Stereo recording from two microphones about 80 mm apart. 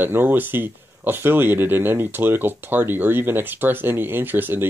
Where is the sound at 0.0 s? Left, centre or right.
Right.